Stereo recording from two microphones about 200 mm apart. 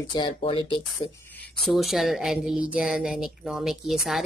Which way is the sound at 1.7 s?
Centre (ahead or behind).